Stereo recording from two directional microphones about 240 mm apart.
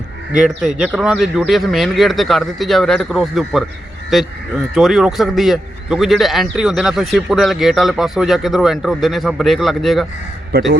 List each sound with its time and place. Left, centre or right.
0.4 s a man's voice: centre
10.5 s speech: right